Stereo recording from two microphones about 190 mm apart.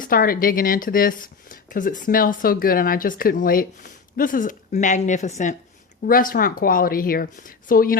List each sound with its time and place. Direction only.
0.0 s speech: 50° left (ahead or behind)